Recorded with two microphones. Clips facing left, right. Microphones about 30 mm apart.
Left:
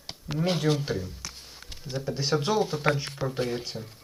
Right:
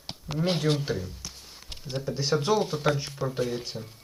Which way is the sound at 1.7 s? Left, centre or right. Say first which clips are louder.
Right 4 dB; right.